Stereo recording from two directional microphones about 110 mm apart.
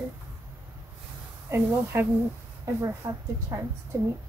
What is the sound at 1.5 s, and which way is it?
A woman's voice, 20° right (ahead or behind).